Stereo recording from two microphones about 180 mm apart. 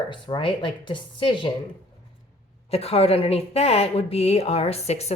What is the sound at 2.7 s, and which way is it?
A woman's voice, 35° left (ahead or behind).